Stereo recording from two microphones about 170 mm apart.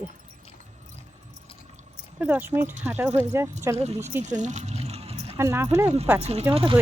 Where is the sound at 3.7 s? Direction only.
40° right (ahead or behind).